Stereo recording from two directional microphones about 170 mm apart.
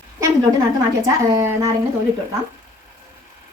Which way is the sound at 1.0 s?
15° right (ahead or behind).